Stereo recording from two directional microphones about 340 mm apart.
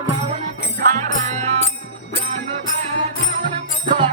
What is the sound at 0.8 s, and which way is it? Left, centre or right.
Music, right.